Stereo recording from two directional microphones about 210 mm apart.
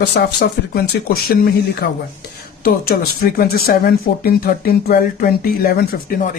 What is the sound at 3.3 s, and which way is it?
Speech, 45° left (ahead or behind).